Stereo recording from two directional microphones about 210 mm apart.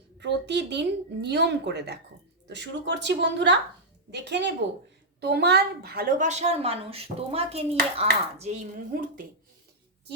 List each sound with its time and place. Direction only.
0.2 s a woman's voice: 55° right (ahead or behind)